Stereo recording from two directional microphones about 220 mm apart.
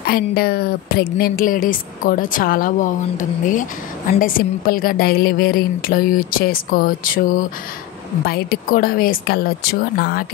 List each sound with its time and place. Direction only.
0.0 s a woman's voice: 45° left (ahead or behind)